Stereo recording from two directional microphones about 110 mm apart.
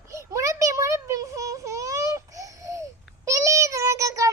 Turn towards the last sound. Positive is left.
turn(degrees=-30)  # may be behind; listen again after turning